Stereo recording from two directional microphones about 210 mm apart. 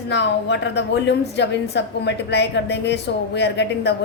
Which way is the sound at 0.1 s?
55° left (ahead or behind).